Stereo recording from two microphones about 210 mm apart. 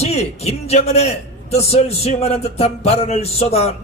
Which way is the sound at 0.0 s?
30° left (ahead or behind).